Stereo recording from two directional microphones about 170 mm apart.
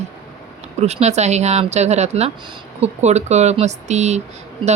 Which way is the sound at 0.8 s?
40° right (ahead or behind).